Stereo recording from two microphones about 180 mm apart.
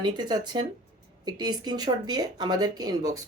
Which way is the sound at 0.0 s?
25° right (ahead or behind).